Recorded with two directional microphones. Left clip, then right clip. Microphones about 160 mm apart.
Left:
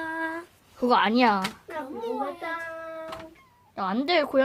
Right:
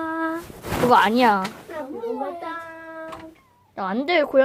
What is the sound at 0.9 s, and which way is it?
Speech, 5° left (ahead or behind).